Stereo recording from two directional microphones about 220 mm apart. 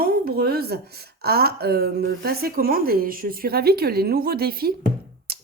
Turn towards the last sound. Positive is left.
turn(degrees=-45)  # may be behind; listen again after turning